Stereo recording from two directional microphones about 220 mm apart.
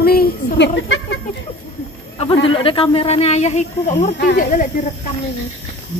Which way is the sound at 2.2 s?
25° left (ahead or behind).